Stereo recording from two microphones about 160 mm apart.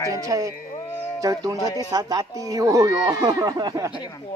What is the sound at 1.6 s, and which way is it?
Speech, 20° left (ahead or behind).